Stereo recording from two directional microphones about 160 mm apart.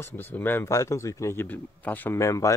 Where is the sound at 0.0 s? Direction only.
15° left (ahead or behind).